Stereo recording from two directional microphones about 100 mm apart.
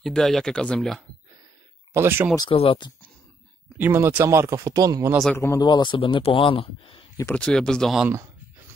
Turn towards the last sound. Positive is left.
turn(degrees=5)  # may be behind; listen again after turning